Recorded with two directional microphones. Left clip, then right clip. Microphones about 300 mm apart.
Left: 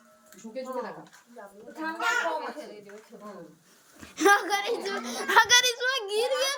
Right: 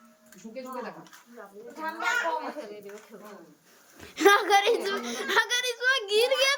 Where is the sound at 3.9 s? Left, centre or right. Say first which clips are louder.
Right 1 dB; centre.